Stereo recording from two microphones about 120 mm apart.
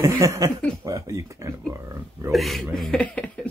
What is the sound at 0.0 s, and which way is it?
Speech, 25° right (ahead or behind).